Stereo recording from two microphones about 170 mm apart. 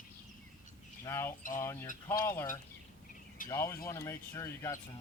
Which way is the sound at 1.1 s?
15° left (ahead or behind).